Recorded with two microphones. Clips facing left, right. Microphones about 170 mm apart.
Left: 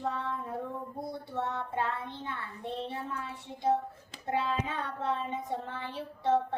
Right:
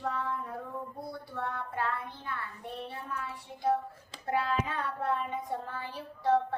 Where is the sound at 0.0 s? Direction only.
20° left (ahead or behind).